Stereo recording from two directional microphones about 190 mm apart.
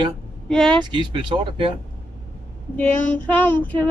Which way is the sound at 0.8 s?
25° right (ahead or behind).